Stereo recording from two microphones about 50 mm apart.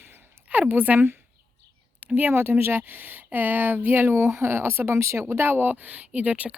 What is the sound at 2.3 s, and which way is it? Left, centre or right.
Speech, right.